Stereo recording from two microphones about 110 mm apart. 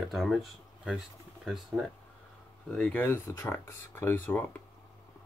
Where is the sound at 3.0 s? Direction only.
20° left (ahead or behind).